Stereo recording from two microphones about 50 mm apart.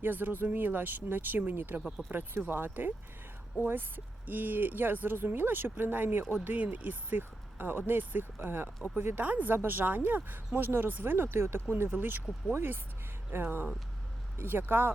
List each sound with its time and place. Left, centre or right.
0.0 s speech: right
11.7 s speech: right